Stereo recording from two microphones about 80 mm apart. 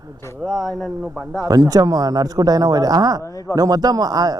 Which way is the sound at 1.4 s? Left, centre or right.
Right.